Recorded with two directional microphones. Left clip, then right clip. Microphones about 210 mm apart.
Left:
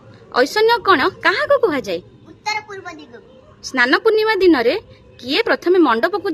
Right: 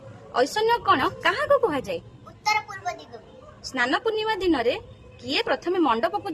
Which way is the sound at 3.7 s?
20° left (ahead or behind).